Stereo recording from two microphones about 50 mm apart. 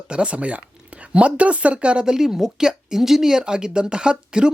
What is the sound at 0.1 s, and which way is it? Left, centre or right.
Speech, right.